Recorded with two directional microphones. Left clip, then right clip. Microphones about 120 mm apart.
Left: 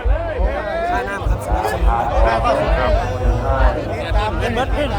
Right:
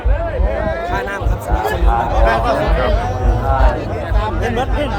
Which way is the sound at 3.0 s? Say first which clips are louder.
Right 2 dB; 35° left (ahead or behind).